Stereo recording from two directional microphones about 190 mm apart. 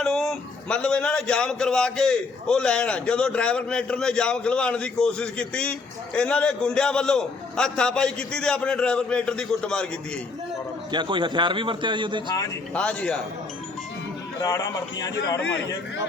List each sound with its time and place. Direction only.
0.0 s a man's voice: centre (ahead or behind)
10.9 s a man's voice: 25° right (ahead or behind)
12.7 s a man's voice: 5° left (ahead or behind)
14.3 s speech: 20° left (ahead or behind)